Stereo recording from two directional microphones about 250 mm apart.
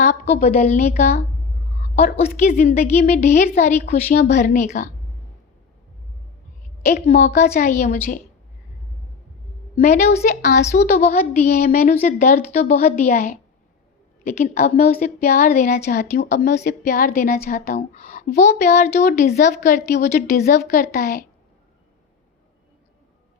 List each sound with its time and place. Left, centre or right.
0.0 s a woman's voice: left
7.1 s a woman's voice: left
9.7 s a woman's voice: left